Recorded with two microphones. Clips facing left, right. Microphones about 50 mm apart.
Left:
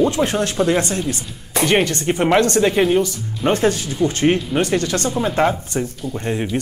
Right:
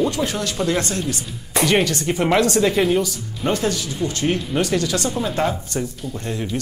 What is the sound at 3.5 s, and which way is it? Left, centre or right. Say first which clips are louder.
Speech: left 4 dB; left.